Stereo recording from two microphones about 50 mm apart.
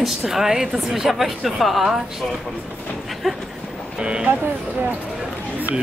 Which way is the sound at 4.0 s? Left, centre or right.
Centre.